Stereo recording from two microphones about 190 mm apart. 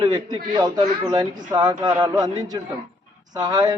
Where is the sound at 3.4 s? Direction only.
20° right (ahead or behind).